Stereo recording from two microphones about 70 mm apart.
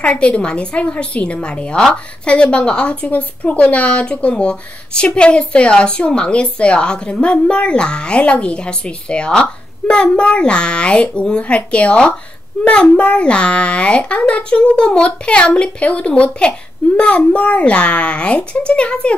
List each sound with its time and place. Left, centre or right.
0.0 s speech: centre